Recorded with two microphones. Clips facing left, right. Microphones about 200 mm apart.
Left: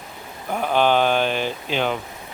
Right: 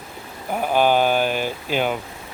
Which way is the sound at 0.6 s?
10° right (ahead or behind).